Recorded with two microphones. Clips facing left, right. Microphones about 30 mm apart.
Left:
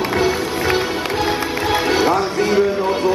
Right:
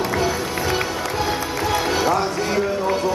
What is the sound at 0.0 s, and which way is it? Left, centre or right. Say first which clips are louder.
Music: left 3 dB; left.